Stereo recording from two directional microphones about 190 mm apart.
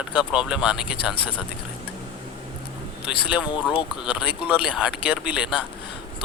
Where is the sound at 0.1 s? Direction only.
5° right (ahead or behind).